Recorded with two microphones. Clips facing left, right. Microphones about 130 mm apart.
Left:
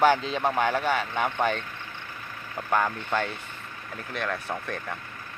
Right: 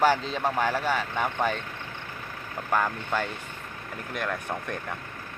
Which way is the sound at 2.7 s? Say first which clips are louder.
Left 1 dB; 5° right (ahead or behind).